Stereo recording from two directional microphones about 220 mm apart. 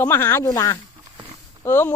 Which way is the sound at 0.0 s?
10° left (ahead or behind).